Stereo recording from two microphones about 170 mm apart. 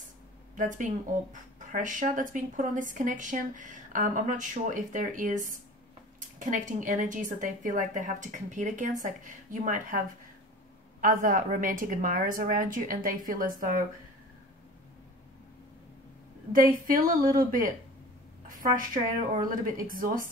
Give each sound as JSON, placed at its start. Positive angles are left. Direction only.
{"t": 0.6, "sound": "speech", "side_deg": -50}
{"t": 16.8, "sound": "a woman's voice", "side_deg": -55}